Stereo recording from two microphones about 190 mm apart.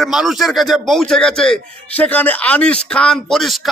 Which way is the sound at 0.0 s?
Centre (ahead or behind).